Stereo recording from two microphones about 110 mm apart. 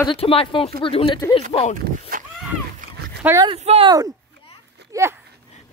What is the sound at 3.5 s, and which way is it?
Speech, 70° right (ahead or behind).